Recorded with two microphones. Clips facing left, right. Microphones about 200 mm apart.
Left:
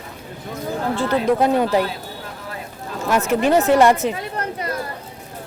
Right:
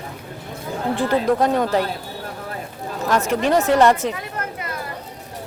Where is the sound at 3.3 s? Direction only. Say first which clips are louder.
Left 3 dB; 5° left (ahead or behind).